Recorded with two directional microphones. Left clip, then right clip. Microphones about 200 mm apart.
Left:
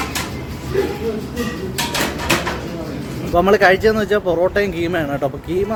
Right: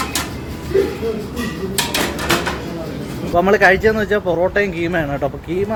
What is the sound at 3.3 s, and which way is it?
Speech, 10° left (ahead or behind).